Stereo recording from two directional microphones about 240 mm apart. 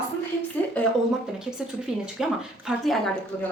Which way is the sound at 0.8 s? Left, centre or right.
Centre.